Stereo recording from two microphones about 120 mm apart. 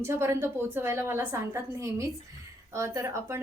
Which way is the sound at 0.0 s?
20° right (ahead or behind).